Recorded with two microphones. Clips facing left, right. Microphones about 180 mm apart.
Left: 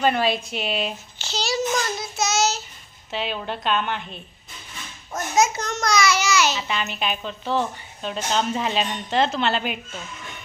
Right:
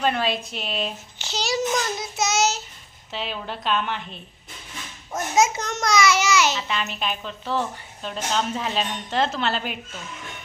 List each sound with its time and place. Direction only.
0.0 s a woman's voice: 5° left (ahead or behind)
1.2 s child singing: 15° right (ahead or behind)
3.1 s a woman's voice: centre (ahead or behind)
5.1 s a child's voice: 20° right (ahead or behind)
6.6 s a woman's voice: 5° left (ahead or behind)